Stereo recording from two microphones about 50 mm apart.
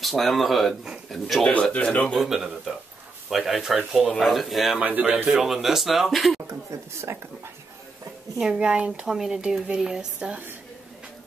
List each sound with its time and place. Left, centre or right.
0.0 s speech: centre
1.5 s speech: left
2.1 s speech: centre
4.7 s speech: right
5.4 s speech: centre
6.7 s speech: right
8.4 s speech: centre